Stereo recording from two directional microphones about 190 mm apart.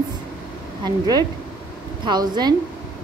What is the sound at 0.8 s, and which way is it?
A woman's voice, 20° right (ahead or behind).